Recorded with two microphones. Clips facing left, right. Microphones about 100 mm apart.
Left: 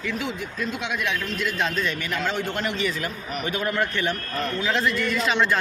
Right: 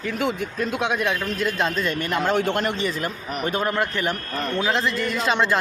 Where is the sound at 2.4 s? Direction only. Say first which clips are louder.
Right 5 dB; 75° right (ahead or behind).